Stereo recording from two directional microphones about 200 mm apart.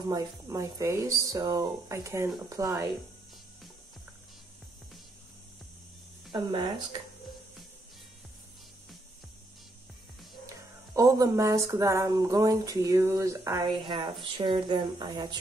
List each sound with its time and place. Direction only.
0.1 s speech: 15° right (ahead or behind)
6.3 s speech: 20° right (ahead or behind)
11.0 s speech: 15° right (ahead or behind)